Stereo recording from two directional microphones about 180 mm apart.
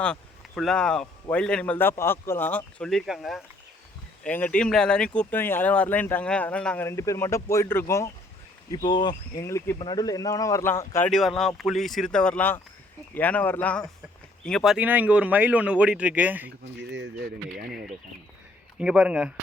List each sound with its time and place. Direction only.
0.0 s a man's voice: 5° left (ahead or behind)
11.1 s a man's voice: centre (ahead or behind)
16.9 s speech: 70° right (ahead or behind)
17.7 s a man's voice: centre (ahead or behind)